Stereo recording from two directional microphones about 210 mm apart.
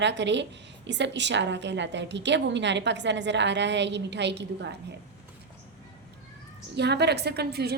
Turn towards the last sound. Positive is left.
turn(degrees=-50)  # may be behind; listen again after turning